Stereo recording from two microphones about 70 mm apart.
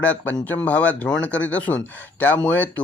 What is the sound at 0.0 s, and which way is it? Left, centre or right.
Speech, left.